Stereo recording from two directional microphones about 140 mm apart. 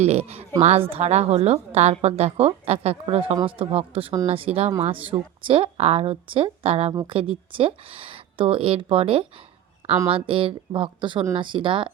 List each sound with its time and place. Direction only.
0.0 s a woman's voice: 50° right (ahead or behind)